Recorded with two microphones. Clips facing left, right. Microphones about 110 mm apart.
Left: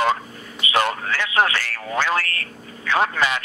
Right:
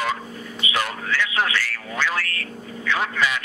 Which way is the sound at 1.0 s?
45° left (ahead or behind).